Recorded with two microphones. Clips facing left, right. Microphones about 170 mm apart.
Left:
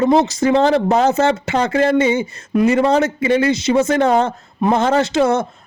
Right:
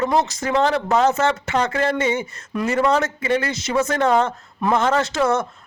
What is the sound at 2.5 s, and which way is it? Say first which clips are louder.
Speech: left 8 dB; 15° left (ahead or behind).